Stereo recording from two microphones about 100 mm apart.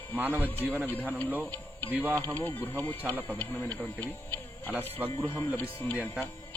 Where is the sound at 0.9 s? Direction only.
15° left (ahead or behind).